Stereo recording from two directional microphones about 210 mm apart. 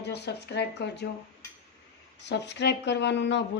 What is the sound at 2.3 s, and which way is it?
Speech, 55° left (ahead or behind).